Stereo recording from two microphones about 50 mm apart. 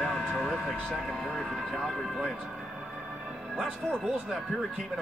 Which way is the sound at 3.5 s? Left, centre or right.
Centre.